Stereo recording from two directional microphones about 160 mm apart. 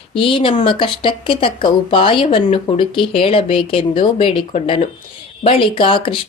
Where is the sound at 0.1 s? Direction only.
35° left (ahead or behind).